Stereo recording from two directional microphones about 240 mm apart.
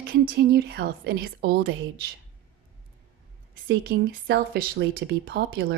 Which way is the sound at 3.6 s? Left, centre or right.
Right.